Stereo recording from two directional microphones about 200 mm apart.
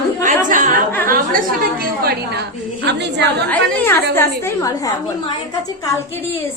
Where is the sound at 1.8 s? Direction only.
50° right (ahead or behind).